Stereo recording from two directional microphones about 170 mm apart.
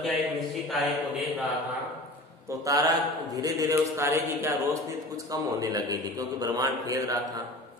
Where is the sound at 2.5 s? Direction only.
20° right (ahead or behind).